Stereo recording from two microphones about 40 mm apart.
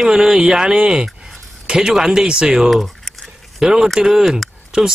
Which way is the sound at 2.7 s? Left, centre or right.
Centre.